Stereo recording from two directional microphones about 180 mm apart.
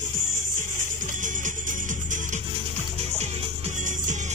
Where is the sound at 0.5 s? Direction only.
45° right (ahead or behind).